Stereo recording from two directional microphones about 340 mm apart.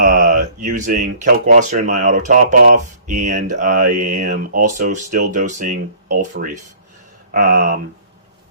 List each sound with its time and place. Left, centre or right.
0.0 s speech: right